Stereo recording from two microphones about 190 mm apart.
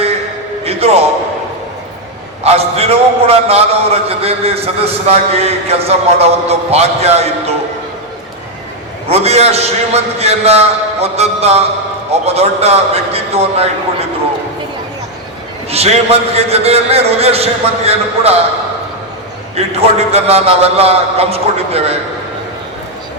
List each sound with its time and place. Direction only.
0.6 s a sound: 35° right (ahead or behind)
2.4 s a man's voice: 30° right (ahead or behind)
9.0 s a man's voice: 35° right (ahead or behind)
15.7 s a man's voice: 35° right (ahead or behind)
19.5 s a man's voice: 30° right (ahead or behind)